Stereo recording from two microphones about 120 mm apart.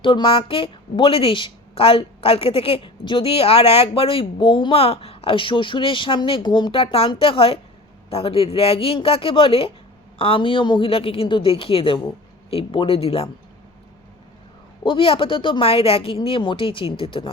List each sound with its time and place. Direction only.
0.0 s a woman's voice: 45° left (ahead or behind)
14.8 s a woman's voice: 50° left (ahead or behind)